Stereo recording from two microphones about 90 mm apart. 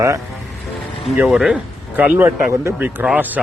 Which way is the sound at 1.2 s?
5° right (ahead or behind).